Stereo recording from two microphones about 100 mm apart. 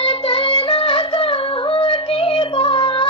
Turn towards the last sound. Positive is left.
turn(degrees=60)  # may be behind; listen again after turning